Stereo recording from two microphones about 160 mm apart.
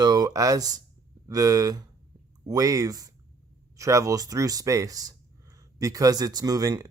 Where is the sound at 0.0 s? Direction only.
25° right (ahead or behind).